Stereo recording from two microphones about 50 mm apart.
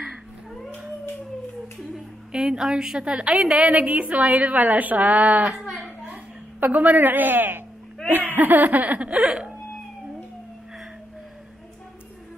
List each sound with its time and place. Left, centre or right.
2.3 s a woman's voice: centre; by 5.5 s right
5.5 s speech: centre
5.8 s a sound: right
8.1 s laughter: right